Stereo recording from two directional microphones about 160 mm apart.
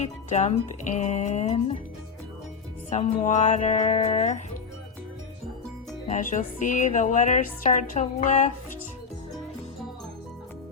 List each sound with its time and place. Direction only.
0.0 s speech: 45° left (ahead or behind)
2.9 s speech: 45° left (ahead or behind)
6.1 s speech: 50° left (ahead or behind)